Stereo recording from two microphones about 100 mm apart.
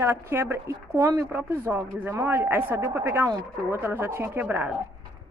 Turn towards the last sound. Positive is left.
turn(degrees=-20)  # may be behind; listen again after turning